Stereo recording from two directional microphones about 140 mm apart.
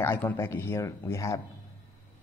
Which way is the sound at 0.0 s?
15° left (ahead or behind).